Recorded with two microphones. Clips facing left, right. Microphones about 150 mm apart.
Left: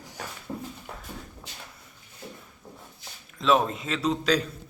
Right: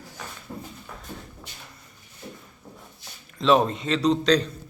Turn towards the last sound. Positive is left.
turn(degrees=5)  # may be behind; listen again after turning